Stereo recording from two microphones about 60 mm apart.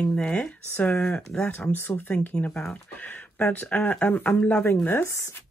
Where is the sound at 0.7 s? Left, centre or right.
Left.